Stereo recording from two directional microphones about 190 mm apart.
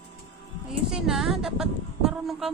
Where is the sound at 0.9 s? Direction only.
Centre (ahead or behind).